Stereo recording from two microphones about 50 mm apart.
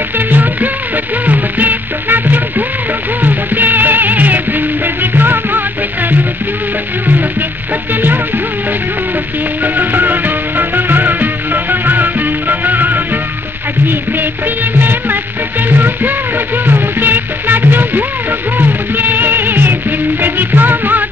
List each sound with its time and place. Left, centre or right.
0.3 s music: right
7.9 s music: right
9.6 s music: right
14.6 s music: right